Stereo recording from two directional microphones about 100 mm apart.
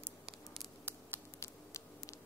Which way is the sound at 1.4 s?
30° left (ahead or behind).